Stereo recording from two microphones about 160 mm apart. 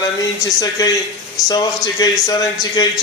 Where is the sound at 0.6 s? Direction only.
25° left (ahead or behind).